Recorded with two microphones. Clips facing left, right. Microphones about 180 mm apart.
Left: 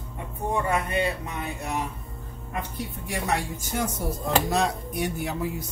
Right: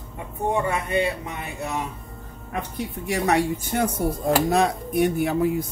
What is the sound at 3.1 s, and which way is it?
Speech, 70° right (ahead or behind).